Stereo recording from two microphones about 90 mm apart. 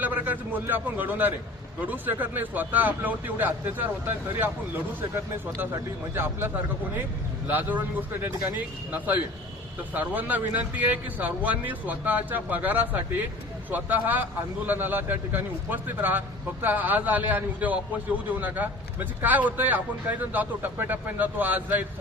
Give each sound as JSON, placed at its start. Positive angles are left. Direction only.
{"t": 0.0, "sound": "a man's voice", "side_deg": -20}
{"t": 6.1, "sound": "a man's voice", "side_deg": -25}